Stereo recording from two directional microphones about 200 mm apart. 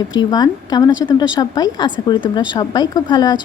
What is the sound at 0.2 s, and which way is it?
Speech, 20° left (ahead or behind).